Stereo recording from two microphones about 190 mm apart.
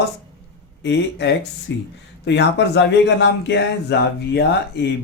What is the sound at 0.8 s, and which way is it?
Speech, 70° left (ahead or behind).